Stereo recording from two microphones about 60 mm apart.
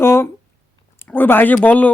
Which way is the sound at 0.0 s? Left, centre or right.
Left.